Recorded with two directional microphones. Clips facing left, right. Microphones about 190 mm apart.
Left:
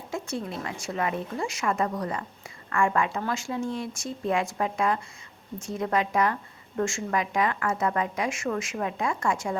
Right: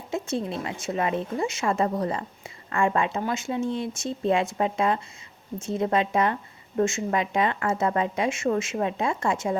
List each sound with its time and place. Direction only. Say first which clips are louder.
0.1 s speech: right 4 dB; 25° right (ahead or behind)